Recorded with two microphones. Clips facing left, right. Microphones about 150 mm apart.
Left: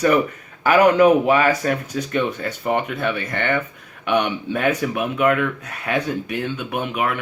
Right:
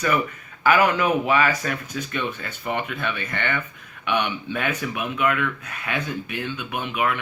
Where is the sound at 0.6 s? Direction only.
40° left (ahead or behind).